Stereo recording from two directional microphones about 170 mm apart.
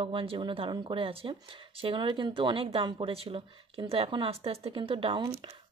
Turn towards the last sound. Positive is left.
turn(degrees=-30)  # may be behind; listen again after turning